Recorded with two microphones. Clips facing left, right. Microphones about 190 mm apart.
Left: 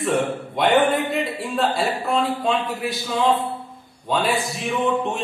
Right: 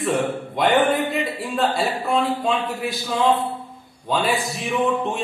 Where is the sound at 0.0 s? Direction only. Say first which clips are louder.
Even; centre (ahead or behind).